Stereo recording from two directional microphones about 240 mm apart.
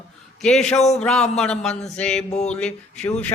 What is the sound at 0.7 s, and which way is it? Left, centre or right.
Speech, left.